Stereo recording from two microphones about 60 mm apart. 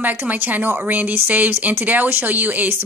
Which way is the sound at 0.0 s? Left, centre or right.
Right.